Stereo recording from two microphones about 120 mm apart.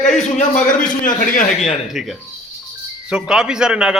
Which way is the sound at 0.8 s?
90° left.